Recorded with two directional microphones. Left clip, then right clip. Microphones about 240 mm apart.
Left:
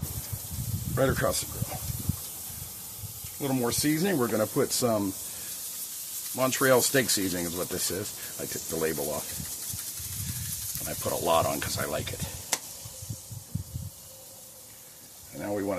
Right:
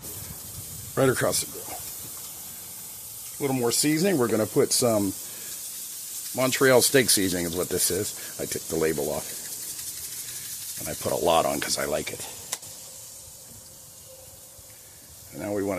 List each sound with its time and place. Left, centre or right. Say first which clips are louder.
0.9 s speech: right 3 dB; right
3.3 s speech: right 4 dB; right
6.3 s speech: right 3 dB; right
10.9 s speech: right 3 dB; right
15.3 s a sound: right 3 dB; right